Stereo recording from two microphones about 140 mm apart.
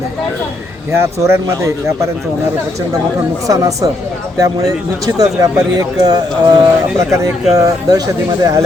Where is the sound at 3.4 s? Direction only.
25° right (ahead or behind).